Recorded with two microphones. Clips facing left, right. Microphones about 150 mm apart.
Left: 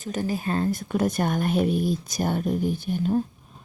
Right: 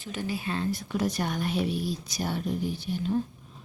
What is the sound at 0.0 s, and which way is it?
A woman's voice, 45° left (ahead or behind).